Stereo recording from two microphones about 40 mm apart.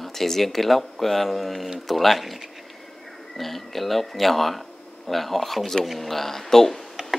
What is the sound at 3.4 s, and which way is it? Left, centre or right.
Speech, centre.